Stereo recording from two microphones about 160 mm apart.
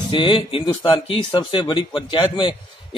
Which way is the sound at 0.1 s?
35° left (ahead or behind).